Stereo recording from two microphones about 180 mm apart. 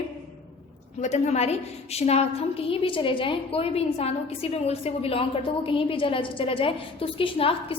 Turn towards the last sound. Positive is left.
turn(degrees=30)  # may be behind; listen again after turning